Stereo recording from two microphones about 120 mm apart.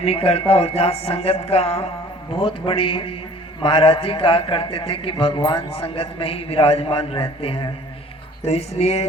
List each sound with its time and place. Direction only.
0.0 s speech: 55° left (ahead or behind)
2.4 s a man's voice: 45° left (ahead or behind)
8.4 s speech: 60° left (ahead or behind)